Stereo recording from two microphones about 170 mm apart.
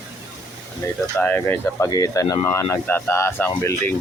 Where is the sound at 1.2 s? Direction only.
10° left (ahead or behind).